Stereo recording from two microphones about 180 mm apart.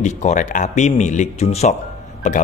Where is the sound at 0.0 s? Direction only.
40° left (ahead or behind).